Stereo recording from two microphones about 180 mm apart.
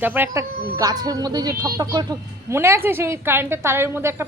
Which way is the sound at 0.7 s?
20° right (ahead or behind).